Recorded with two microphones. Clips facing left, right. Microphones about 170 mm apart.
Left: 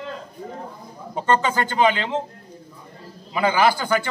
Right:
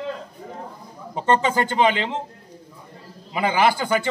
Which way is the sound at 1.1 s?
20° right (ahead or behind).